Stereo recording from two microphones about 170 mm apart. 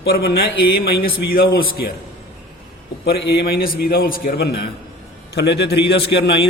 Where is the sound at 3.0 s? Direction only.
65° left (ahead or behind).